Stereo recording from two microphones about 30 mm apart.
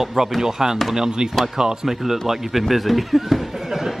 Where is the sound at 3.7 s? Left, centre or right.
Centre.